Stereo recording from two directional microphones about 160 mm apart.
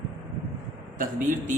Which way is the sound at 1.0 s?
60° right (ahead or behind).